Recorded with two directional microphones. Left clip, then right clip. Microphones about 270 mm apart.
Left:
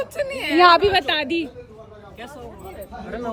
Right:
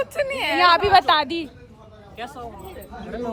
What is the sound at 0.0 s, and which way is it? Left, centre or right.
Speech, centre.